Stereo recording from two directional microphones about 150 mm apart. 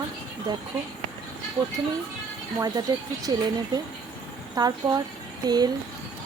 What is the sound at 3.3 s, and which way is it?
Speech, 30° right (ahead or behind).